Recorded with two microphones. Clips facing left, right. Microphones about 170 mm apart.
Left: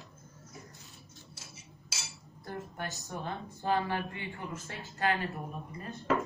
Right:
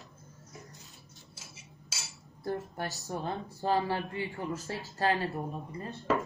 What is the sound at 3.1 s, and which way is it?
Speech, 35° right (ahead or behind).